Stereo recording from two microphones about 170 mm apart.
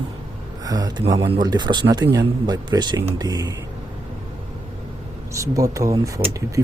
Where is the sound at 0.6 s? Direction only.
20° right (ahead or behind).